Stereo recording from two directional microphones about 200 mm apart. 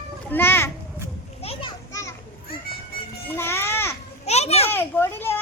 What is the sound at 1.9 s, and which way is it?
Children playing, 15° left (ahead or behind).